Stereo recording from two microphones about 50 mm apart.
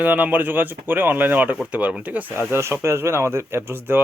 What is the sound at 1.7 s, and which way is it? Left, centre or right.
Speech, right.